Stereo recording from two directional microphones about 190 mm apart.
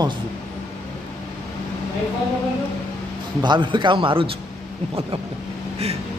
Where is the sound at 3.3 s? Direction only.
25° right (ahead or behind).